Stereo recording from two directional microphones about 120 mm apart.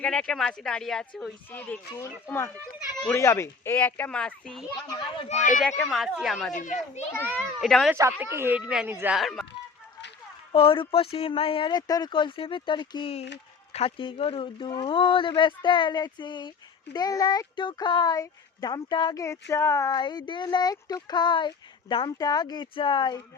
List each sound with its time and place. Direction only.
0.0 s speech: 5° left (ahead or behind)
1.5 s speech: 15° left (ahead or behind)
5.3 s speech: 80° left
5.8 s speech: centre (ahead or behind)
6.5 s a child's voice: 90° left
7.1 s speech: 15° left (ahead or behind)
7.6 s speech: centre (ahead or behind)
7.9 s speech: 25° right (ahead or behind)
9.1 s speech: centre (ahead or behind)
10.5 s speech: 50° left (ahead or behind)
19.2 s speech: 25° left (ahead or behind)
20.0 s speech: 40° left (ahead or behind)